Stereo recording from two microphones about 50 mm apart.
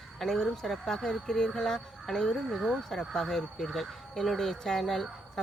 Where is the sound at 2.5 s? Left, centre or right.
Centre.